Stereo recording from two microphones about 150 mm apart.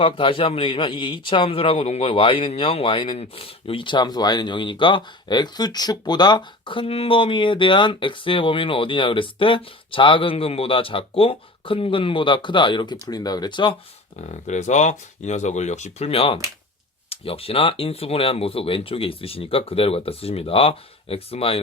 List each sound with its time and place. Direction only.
0.0 s a man's voice: 35° left (ahead or behind)
14.2 s a man's voice: 50° left (ahead or behind)